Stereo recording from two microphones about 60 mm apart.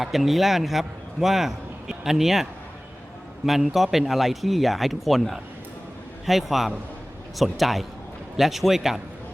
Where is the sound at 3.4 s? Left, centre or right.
Centre.